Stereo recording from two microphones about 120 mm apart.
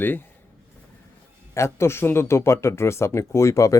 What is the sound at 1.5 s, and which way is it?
Speech, 20° left (ahead or behind).